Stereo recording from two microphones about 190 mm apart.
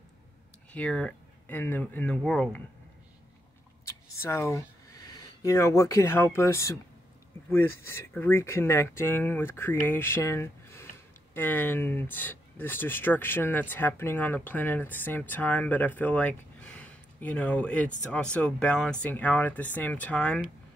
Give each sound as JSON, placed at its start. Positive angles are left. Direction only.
{"t": 0.7, "sound": "speech", "side_deg": 5}
{"t": 3.8, "sound": "speech", "side_deg": 15}